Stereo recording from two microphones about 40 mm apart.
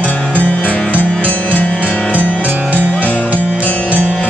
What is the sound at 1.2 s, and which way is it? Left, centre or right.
Music, left.